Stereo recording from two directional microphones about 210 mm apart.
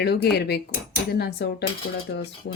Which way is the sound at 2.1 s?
60° left (ahead or behind).